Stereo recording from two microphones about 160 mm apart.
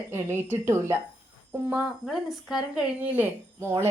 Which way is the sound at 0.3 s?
15° right (ahead or behind).